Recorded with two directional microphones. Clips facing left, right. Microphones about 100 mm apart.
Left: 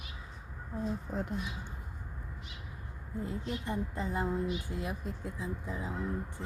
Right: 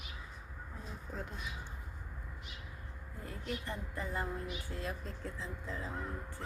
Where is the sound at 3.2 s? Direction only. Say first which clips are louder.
Left 4 dB; 20° left (ahead or behind).